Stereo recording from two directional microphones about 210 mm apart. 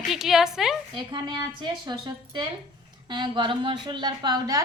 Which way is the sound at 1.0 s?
20° right (ahead or behind).